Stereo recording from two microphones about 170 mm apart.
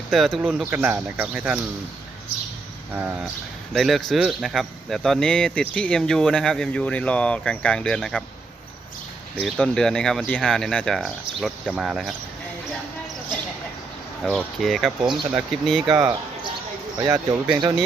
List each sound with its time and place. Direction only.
0.1 s speech: centre (ahead or behind)
2.9 s speech: 10° right (ahead or behind)
9.4 s speech: 5° left (ahead or behind)
14.3 s speech: 5° left (ahead or behind)
17.1 s speech: 25° right (ahead or behind)